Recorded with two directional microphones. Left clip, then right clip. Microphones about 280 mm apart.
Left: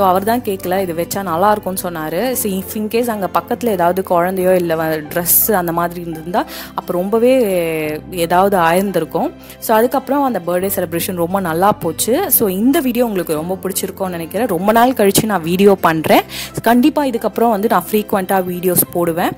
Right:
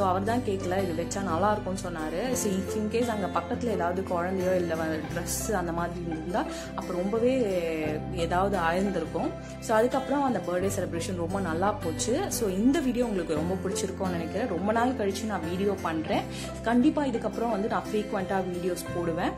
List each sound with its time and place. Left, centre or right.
0.0 s speech: left
2.9 s speech: left
7.2 s speech: left